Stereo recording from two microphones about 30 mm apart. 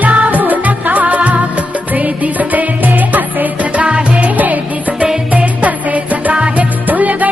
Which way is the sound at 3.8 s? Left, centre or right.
Right.